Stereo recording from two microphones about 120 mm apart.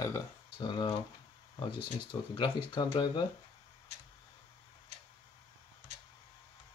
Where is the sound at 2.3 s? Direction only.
45° left (ahead or behind).